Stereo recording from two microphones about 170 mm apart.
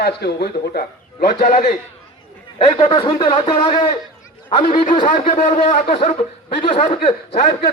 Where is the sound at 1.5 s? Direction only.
45° left (ahead or behind).